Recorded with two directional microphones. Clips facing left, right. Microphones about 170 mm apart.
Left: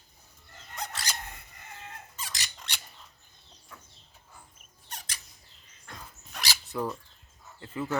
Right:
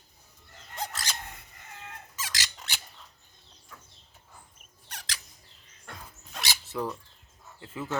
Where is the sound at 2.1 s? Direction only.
90° right.